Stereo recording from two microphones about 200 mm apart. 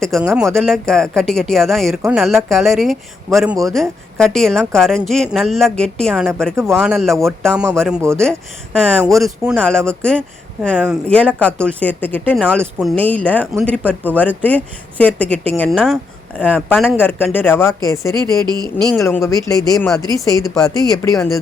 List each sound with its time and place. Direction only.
0.2 s a man's voice: 10° right (ahead or behind)
0.4 s speech: centre (ahead or behind)
3.2 s a man's voice: 15° right (ahead or behind)
3.6 s speech: centre (ahead or behind)
18.4 s speech: 20° right (ahead or behind)
18.9 s speech: 15° left (ahead or behind)